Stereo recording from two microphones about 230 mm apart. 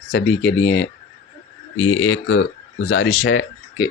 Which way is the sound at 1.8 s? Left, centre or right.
Left.